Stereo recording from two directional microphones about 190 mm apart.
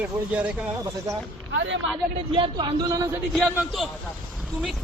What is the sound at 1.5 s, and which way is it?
Speech, 75° right (ahead or behind).